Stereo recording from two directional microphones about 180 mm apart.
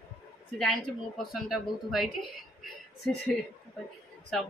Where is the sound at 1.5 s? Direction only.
Centre (ahead or behind).